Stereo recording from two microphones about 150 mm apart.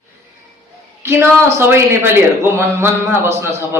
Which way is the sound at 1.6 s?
15° right (ahead or behind).